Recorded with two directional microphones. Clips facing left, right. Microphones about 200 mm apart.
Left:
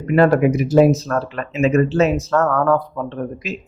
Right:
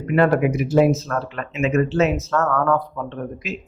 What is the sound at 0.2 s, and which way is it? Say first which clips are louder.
Speech: left 3 dB; 35° left (ahead or behind).